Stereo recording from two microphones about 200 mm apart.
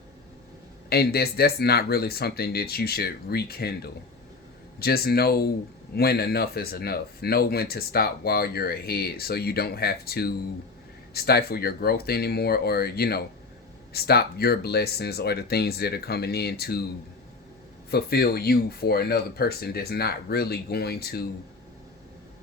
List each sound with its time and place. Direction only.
0.9 s speech: 50° left (ahead or behind)
17.9 s speech: 50° left (ahead or behind)